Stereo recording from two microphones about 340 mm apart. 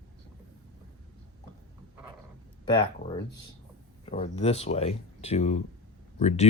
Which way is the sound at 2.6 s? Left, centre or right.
Centre.